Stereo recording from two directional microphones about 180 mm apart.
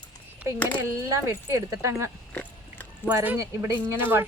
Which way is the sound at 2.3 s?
10° left (ahead or behind).